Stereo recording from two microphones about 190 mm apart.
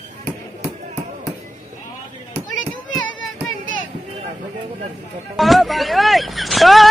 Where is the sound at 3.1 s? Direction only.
90° left.